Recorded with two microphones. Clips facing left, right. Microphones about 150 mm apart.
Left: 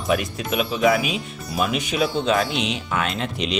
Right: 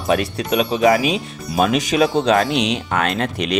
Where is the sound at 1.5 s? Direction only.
85° right.